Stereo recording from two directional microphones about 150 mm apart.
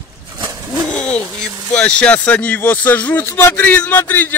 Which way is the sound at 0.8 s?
5° left (ahead or behind).